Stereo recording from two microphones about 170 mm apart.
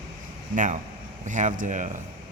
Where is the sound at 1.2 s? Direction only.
45° right (ahead or behind).